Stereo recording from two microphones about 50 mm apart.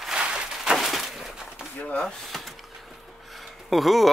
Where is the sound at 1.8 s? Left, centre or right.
Left.